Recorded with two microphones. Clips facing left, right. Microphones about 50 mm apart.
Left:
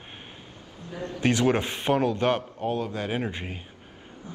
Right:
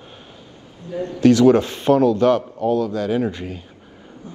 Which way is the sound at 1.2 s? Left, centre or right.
Left.